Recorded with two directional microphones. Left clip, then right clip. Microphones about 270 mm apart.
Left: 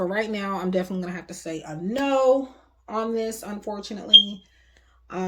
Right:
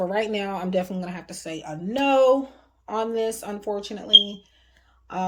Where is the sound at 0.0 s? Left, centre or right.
Right.